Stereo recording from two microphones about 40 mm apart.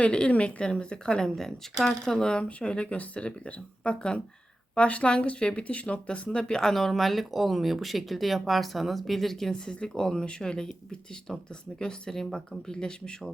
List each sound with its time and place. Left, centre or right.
0.0 s speech: left
1.8 s speech: centre
2.1 s speech: centre
2.4 s speech: left
6.6 s speech: centre
11.8 s speech: centre